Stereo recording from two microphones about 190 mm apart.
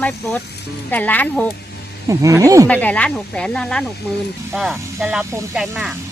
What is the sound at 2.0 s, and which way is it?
Speech, 15° right (ahead or behind).